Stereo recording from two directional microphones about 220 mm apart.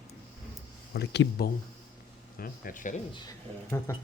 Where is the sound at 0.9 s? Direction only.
50° left (ahead or behind).